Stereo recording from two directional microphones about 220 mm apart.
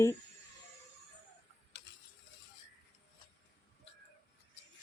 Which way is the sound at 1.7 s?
55° left (ahead or behind).